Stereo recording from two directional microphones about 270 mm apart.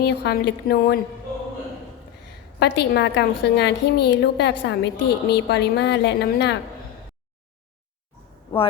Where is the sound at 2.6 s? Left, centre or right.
Left.